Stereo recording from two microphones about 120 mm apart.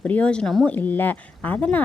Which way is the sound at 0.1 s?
10° left (ahead or behind).